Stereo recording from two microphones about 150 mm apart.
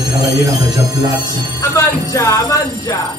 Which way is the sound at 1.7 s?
20° left (ahead or behind).